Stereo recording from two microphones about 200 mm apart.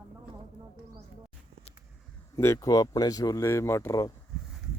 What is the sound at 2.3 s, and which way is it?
Speech, 15° left (ahead or behind).